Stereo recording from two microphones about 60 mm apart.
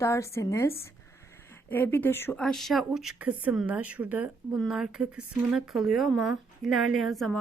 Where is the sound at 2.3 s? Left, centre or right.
Centre.